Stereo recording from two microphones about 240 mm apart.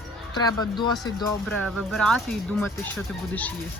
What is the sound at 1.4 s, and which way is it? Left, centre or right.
A woman's voice, centre.